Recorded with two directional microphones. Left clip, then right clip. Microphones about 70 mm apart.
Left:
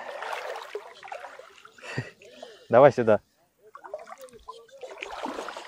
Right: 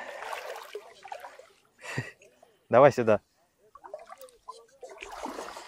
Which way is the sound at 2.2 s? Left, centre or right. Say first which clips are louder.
Left 12 dB; left.